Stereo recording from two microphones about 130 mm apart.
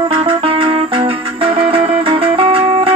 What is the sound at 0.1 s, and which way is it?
Music, 45° right (ahead or behind).